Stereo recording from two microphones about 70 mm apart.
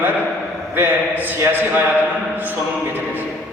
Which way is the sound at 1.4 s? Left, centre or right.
Right.